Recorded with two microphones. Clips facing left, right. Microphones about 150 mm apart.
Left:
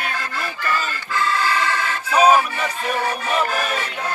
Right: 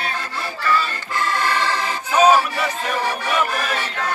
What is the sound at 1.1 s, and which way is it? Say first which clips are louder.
Music: even; 35° right (ahead or behind).